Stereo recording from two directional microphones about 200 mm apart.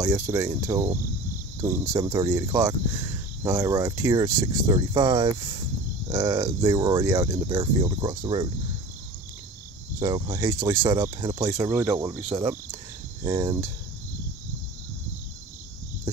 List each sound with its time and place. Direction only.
0.0 s speech: 10° right (ahead or behind)
9.9 s speech: 20° right (ahead or behind)